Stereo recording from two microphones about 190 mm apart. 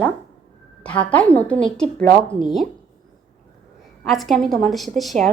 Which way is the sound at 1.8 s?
45° right (ahead or behind).